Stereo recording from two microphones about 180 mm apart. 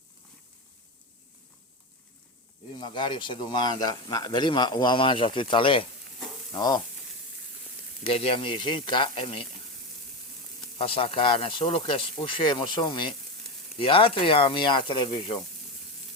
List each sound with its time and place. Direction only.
2.8 s a man's voice: 25° left (ahead or behind)
8.0 s a man's voice: 30° left (ahead or behind)
10.8 s a man's voice: 30° left (ahead or behind)